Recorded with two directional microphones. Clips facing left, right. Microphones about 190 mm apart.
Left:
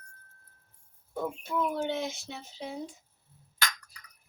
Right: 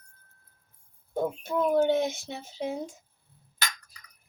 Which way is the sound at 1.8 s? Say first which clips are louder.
Right 7 dB; 45° right (ahead or behind).